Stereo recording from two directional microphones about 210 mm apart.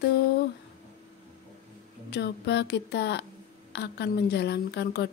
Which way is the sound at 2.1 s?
55° left (ahead or behind).